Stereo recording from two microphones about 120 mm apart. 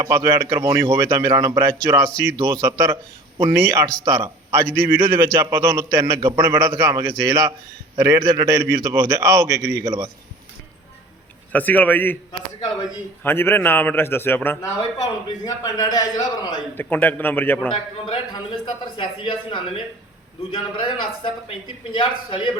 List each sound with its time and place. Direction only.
0.0 s a man's voice: 25° right (ahead or behind)
11.5 s a man's voice: 15° left (ahead or behind)
13.2 s a man's voice: 20° left (ahead or behind)
14.9 s a man's voice: 30° left (ahead or behind)
16.7 s a man's voice: 15° left (ahead or behind)
17.7 s speech: 45° left (ahead or behind)